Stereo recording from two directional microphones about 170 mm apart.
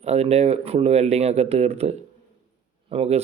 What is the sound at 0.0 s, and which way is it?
Speech, 40° right (ahead or behind).